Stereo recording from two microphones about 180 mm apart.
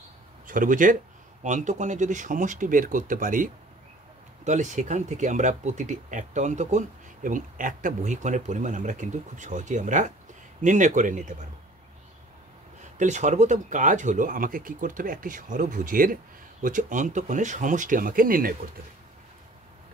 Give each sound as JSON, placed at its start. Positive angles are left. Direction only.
{"t": 0.5, "sound": "speech", "side_deg": -50}
{"t": 12.9, "sound": "speech", "side_deg": -40}